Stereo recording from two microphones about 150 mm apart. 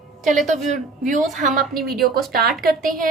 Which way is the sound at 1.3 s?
60° right (ahead or behind).